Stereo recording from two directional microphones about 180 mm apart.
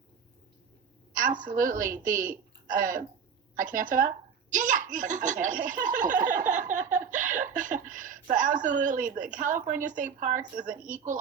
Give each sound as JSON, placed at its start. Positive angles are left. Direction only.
{"t": 1.1, "sound": "a woman's voice", "side_deg": -50}